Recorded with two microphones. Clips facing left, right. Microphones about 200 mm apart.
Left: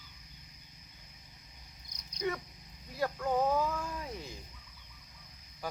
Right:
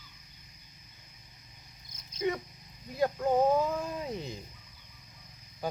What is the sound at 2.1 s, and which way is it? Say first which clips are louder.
Cat: right 4 dB; 20° right (ahead or behind).